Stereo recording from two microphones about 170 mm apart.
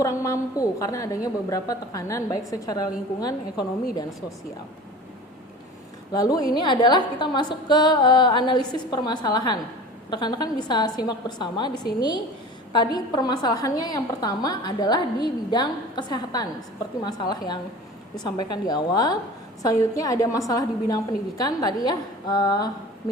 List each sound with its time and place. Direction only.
0.0 s a woman's voice: 20° left (ahead or behind)
6.1 s a woman's voice: 20° left (ahead or behind)